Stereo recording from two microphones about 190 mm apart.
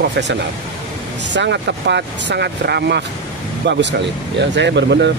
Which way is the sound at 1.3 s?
65° right (ahead or behind).